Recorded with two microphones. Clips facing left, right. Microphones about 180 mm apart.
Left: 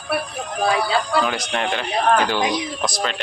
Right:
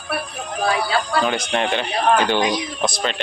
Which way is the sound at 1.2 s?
Centre (ahead or behind).